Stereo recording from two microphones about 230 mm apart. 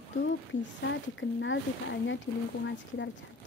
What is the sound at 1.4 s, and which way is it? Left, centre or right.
Speech, left.